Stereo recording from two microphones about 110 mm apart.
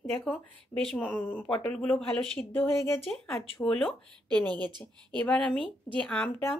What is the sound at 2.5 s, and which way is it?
Speech, 20° left (ahead or behind).